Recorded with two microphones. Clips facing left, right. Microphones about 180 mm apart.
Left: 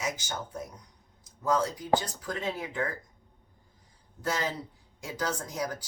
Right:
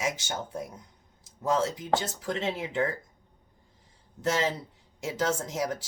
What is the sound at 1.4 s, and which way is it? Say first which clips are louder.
Speech: right 1 dB; 25° right (ahead or behind).